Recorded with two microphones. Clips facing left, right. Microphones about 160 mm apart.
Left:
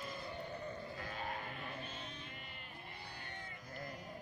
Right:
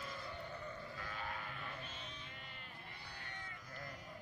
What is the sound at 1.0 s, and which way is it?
Sheep, 40° left (ahead or behind).